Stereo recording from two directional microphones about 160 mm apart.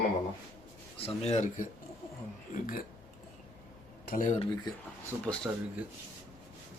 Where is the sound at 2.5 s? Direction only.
60° left (ahead or behind).